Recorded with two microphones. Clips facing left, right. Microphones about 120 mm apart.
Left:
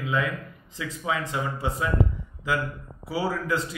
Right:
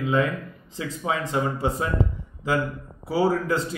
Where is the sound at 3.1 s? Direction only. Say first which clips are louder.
Right 5 dB; 35° right (ahead or behind).